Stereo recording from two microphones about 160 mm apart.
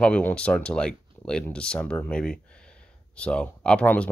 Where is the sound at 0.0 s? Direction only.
5° left (ahead or behind).